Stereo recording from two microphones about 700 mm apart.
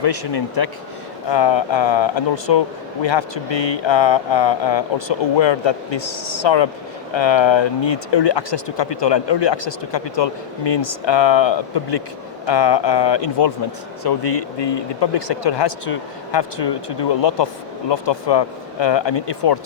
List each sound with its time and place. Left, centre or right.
0.0 s speech: left